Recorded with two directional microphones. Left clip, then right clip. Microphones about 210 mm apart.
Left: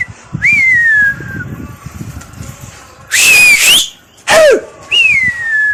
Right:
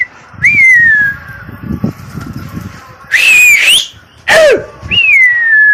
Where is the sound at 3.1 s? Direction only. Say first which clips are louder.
Right 1 dB; 20° left (ahead or behind).